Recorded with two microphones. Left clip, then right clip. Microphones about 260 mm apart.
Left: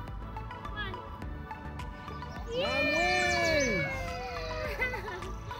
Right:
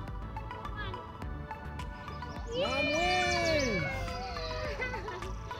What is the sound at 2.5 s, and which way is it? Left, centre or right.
Music, left.